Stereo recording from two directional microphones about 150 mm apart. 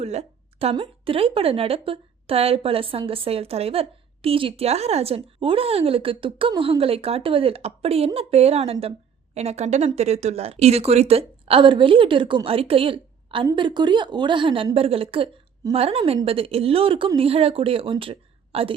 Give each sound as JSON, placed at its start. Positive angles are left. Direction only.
{"t": 0.0, "sound": "a woman's voice", "side_deg": -45}